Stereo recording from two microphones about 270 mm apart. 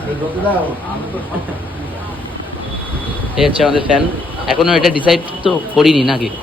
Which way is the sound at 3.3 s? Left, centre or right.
Centre.